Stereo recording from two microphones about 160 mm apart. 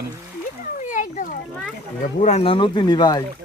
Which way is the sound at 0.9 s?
55° left (ahead or behind).